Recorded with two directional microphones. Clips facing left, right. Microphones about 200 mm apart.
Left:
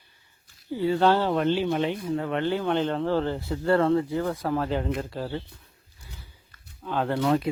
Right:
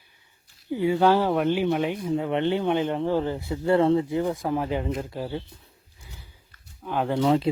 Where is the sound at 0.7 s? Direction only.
15° right (ahead or behind).